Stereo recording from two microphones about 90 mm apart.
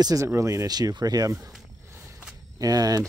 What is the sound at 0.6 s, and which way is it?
Speech, 45° right (ahead or behind).